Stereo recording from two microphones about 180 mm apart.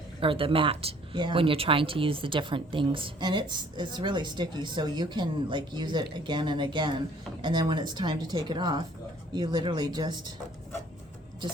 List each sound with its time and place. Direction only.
0.2 s speech: 30° right (ahead or behind)